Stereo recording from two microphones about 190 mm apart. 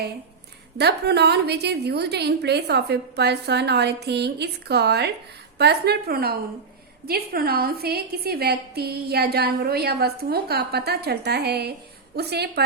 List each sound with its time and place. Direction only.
0.8 s a woman's voice: 60° right (ahead or behind)